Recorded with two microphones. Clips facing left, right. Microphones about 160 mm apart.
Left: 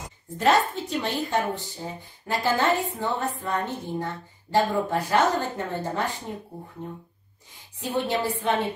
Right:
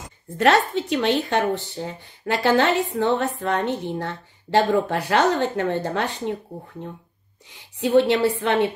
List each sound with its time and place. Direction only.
0.4 s speech: 75° right (ahead or behind)
7.8 s speech: 70° right (ahead or behind)